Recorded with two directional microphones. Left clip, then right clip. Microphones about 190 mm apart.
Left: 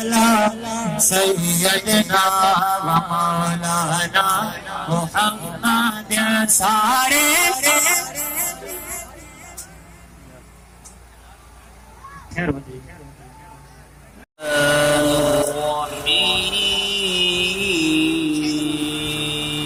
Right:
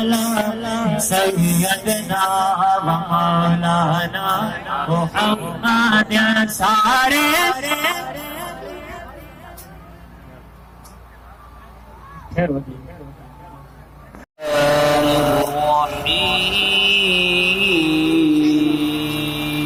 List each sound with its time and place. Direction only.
0.0 s music: 10° right (ahead or behind)
14.6 s mantra: 35° right (ahead or behind)